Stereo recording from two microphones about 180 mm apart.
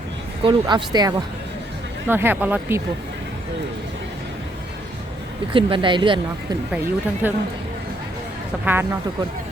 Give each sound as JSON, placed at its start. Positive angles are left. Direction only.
{"t": 0.4, "sound": "a woman's voice", "side_deg": -25}
{"t": 2.0, "sound": "speech", "side_deg": -10}
{"t": 5.5, "sound": "a woman's voice", "side_deg": -30}
{"t": 7.2, "sound": "speech", "side_deg": -10}
{"t": 8.6, "sound": "speech", "side_deg": -10}